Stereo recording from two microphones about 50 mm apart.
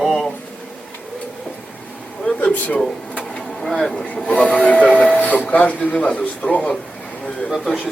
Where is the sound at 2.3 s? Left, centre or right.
Left.